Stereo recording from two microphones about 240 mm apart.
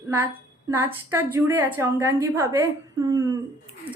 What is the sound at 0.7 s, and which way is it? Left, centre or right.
A woman's voice, centre.